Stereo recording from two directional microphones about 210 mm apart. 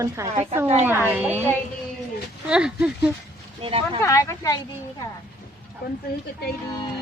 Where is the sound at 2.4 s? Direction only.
5° right (ahead or behind).